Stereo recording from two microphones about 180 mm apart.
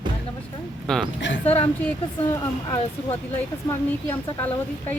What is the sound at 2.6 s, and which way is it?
Speech, 20° left (ahead or behind).